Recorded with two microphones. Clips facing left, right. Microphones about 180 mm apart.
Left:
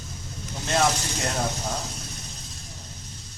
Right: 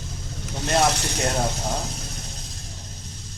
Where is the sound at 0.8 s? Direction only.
70° right (ahead or behind).